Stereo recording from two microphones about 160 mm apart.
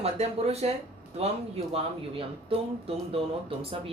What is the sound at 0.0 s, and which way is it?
Speech, 40° right (ahead or behind).